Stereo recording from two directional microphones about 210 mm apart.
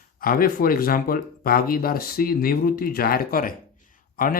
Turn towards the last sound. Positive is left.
turn(degrees=45)  # may be behind; listen again after turning